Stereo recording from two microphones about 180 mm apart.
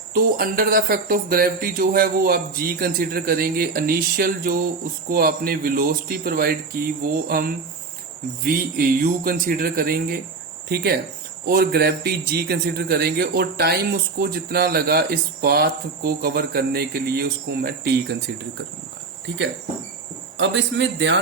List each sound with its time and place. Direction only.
0.1 s a man's voice: 55° right (ahead or behind)
20.3 s a man's voice: 80° right